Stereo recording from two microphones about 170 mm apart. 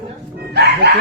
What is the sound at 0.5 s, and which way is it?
Chicken, 75° right (ahead or behind).